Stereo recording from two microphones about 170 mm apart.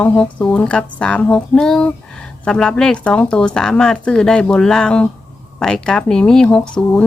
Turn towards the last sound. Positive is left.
turn(degrees=5)  # may be behind; listen again after turning